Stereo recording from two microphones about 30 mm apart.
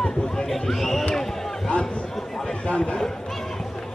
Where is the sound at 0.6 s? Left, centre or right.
Centre.